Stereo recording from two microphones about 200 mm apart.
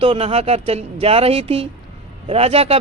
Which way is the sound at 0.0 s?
30° right (ahead or behind).